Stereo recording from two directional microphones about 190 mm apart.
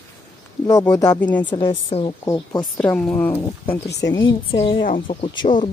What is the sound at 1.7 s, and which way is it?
Speech, 30° left (ahead or behind).